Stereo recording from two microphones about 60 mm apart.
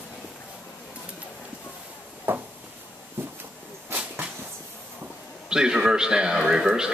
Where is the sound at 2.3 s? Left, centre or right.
Right.